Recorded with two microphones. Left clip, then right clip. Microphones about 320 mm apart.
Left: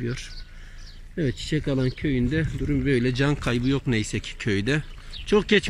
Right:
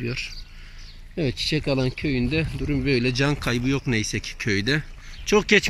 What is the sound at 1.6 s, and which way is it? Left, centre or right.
Speech, centre.